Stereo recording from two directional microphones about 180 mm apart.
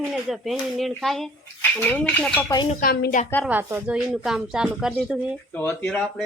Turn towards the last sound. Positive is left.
turn(degrees=5)  # may be behind; listen again after turning